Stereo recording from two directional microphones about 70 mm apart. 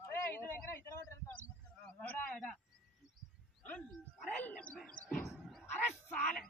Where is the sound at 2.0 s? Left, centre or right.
Left.